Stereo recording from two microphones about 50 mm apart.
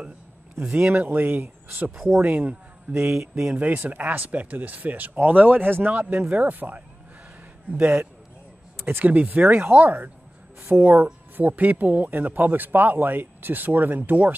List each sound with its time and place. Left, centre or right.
0.6 s speech: right
0.9 s speech: right
3.1 s speech: centre
3.5 s speech: right
8.7 s a sound: right
9.0 s speech: right